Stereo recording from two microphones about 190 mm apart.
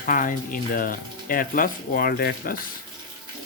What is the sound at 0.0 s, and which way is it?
Speech, 45° left (ahead or behind).